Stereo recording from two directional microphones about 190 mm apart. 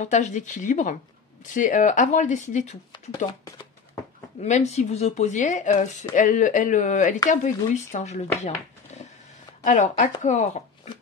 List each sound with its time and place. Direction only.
0.0 s speech: 40° left (ahead or behind)
3.3 s a sound: 15° left (ahead or behind)
4.4 s speech: 35° left (ahead or behind)